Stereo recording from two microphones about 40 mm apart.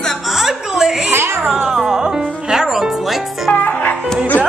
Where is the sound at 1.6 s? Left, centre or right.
Centre.